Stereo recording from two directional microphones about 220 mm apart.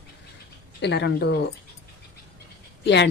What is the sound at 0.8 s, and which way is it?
Speech, 50° left (ahead or behind).